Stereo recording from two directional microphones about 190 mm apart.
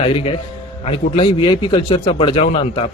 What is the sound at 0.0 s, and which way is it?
A man's voice, 30° left (ahead or behind).